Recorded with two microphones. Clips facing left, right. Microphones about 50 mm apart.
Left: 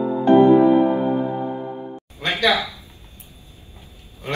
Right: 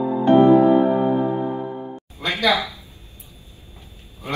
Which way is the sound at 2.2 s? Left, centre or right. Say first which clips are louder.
Left 1 dB; left.